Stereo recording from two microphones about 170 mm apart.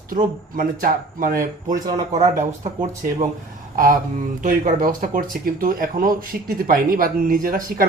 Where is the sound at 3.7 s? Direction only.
55° right (ahead or behind).